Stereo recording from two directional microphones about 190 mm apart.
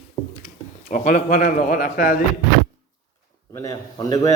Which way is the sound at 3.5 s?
15° left (ahead or behind).